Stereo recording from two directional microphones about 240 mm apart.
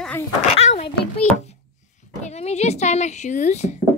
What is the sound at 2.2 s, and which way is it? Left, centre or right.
Speech, left.